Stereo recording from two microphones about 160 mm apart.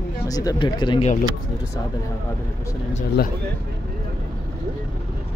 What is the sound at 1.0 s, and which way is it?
Speech, 50° left (ahead or behind).